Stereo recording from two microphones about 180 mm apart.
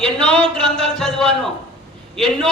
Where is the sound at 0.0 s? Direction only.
5° left (ahead or behind).